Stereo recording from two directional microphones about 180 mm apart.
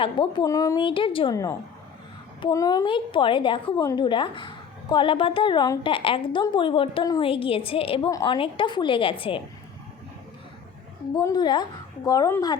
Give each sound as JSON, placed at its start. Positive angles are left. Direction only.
{"t": 0.0, "sound": "a woman's voice", "side_deg": 30}
{"t": 11.1, "sound": "a woman's voice", "side_deg": 20}